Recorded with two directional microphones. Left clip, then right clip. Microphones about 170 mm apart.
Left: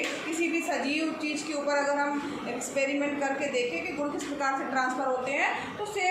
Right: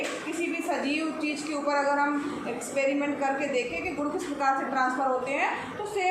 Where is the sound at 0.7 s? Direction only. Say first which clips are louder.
Right 1 dB; 15° right (ahead or behind).